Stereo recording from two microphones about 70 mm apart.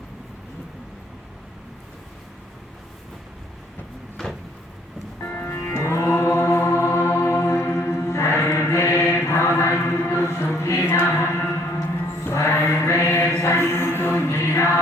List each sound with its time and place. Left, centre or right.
5.2 s music: left
9.9 s a sound: left
10.2 s music: left
12.2 s mantra: left
13.4 s music: left